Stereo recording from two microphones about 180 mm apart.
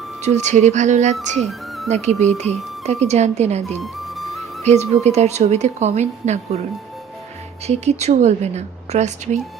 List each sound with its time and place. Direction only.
0.2 s speech: 40° right (ahead or behind)
1.4 s music: centre (ahead or behind)
1.9 s speech: 40° right (ahead or behind)
3.8 s music: centre (ahead or behind)
4.6 s speech: 35° right (ahead or behind)
7.7 s speech: 40° right (ahead or behind)